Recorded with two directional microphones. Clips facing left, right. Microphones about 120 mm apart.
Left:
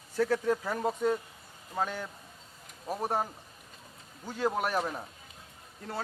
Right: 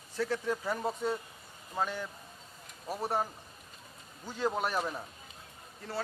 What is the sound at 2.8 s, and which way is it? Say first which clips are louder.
Speech: left 1 dB; 15° left (ahead or behind).